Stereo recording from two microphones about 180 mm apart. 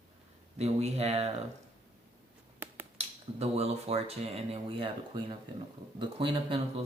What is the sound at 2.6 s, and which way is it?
Finger snapping, 10° right (ahead or behind).